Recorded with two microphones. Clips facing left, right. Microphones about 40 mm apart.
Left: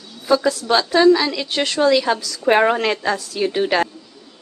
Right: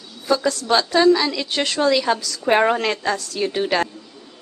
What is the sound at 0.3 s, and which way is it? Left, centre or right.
A woman's voice, centre.